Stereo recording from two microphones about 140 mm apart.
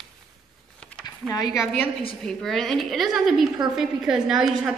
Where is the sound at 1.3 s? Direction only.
25° left (ahead or behind).